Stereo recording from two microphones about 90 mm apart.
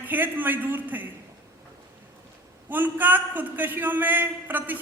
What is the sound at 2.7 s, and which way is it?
A man's voice, 20° right (ahead or behind).